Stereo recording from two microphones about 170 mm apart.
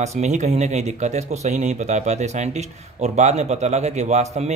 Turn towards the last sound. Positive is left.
turn(degrees=-40)  # may be behind; listen again after turning